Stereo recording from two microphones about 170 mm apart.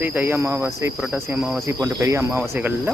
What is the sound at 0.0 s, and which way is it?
Cricket, 10° right (ahead or behind).